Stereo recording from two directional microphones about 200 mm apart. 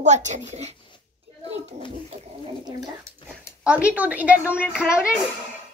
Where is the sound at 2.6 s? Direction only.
15° right (ahead or behind).